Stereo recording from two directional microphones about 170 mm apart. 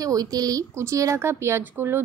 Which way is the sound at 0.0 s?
20° right (ahead or behind).